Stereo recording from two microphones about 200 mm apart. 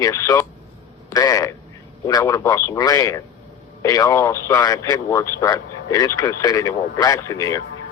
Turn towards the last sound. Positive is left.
turn(degrees=15)  # may be behind; listen again after turning